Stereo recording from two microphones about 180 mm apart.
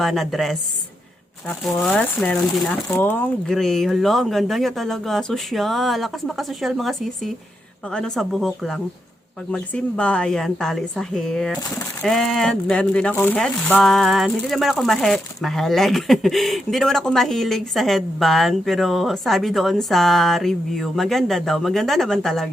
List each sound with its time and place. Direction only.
0.0 s speech: centre (ahead or behind)